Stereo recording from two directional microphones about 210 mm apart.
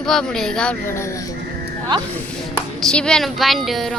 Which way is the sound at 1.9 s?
20° right (ahead or behind).